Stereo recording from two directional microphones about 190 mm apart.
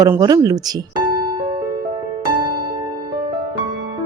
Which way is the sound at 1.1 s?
25° right (ahead or behind).